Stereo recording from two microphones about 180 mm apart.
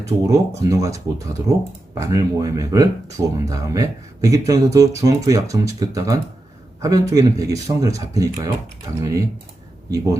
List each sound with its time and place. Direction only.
0.3 s speech: 20° right (ahead or behind)